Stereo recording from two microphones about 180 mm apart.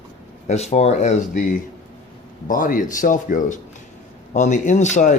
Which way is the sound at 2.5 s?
50° left (ahead or behind).